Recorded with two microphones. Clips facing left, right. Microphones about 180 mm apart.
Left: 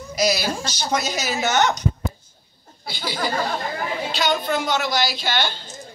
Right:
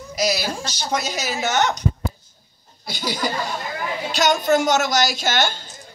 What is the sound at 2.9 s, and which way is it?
Speech, 45° right (ahead or behind).